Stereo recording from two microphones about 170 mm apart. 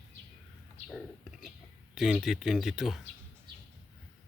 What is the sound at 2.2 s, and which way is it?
Speech, centre (ahead or behind).